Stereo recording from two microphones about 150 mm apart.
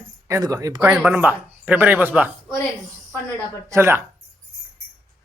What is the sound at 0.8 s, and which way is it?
Speech, 10° right (ahead or behind).